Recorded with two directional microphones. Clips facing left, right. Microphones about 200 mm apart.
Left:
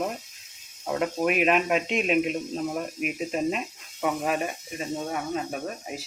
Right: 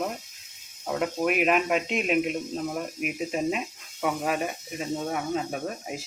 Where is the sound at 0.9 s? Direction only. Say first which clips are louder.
Left 1 dB; centre (ahead or behind).